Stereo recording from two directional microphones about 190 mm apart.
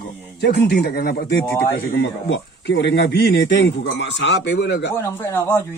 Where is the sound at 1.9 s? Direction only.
65° left (ahead or behind).